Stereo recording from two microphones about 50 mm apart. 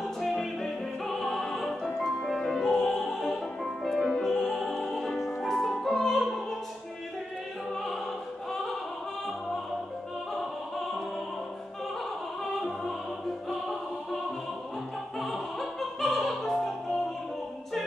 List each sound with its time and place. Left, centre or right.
0.2 s music: centre
15.1 s opera: centre